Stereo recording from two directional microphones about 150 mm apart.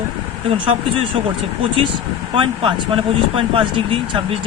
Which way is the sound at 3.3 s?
35° right (ahead or behind).